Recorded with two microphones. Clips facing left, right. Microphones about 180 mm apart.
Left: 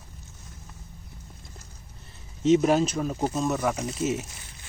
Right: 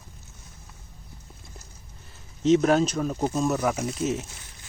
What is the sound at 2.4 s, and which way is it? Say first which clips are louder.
Speech: right 1 dB; 5° left (ahead or behind).